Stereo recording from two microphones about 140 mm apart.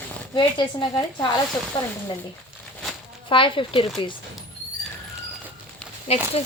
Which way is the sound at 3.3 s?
40° left (ahead or behind).